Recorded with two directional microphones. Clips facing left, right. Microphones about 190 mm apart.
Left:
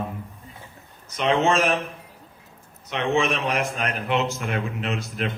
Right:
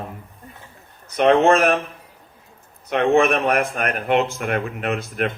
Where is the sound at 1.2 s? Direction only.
55° right (ahead or behind).